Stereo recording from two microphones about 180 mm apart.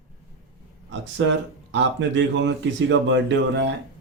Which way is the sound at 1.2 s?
90° right.